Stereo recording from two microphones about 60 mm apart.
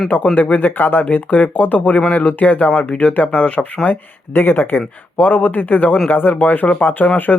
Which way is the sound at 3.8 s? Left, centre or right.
Left.